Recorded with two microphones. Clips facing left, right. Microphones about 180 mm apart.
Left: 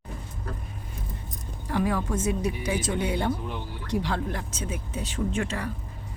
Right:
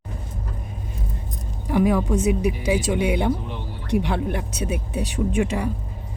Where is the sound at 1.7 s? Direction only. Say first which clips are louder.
Right 7 dB; 15° right (ahead or behind).